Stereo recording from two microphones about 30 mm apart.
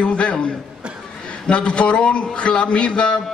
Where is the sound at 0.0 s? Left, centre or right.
Left.